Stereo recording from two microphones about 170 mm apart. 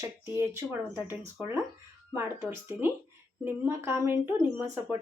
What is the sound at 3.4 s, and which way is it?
Speech, 15° right (ahead or behind).